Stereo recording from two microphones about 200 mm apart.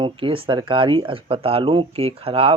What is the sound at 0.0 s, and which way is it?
Speech, 25° right (ahead or behind).